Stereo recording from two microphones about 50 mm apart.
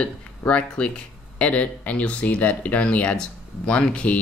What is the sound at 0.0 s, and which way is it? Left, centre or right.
Speech, left.